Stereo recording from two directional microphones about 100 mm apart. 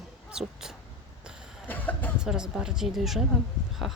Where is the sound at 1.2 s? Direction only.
10° right (ahead or behind).